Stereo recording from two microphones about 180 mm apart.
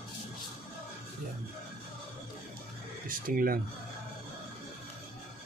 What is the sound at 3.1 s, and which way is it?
Speech, 50° right (ahead or behind).